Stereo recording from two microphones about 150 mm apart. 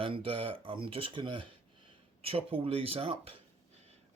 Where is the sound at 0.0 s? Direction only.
40° right (ahead or behind).